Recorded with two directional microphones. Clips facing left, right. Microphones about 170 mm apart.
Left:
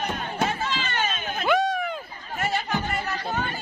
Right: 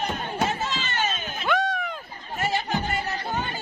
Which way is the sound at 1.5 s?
5° left (ahead or behind).